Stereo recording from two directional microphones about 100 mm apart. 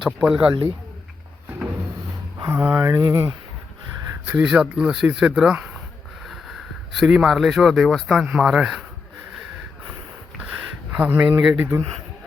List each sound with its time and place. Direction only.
0.0 s speech: 5° right (ahead or behind)
2.6 s speech: 15° right (ahead or behind)
2.8 s speech: 30° right (ahead or behind)
4.4 s speech: 5° right (ahead or behind)
10.9 s speech: 15° right (ahead or behind)